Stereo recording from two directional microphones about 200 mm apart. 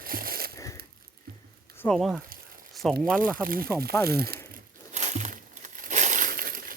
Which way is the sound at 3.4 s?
45° right (ahead or behind).